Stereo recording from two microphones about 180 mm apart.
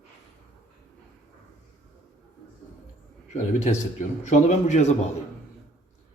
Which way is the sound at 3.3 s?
40° left (ahead or behind).